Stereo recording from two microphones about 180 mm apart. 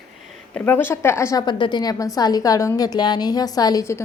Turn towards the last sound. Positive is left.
turn(degrees=15)  # may be behind; listen again after turning